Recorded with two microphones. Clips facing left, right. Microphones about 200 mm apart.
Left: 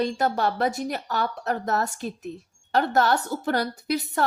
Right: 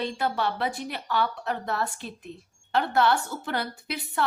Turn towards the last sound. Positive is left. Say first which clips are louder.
# left 5 dB
turn(degrees=40)  # may be behind; listen again after turning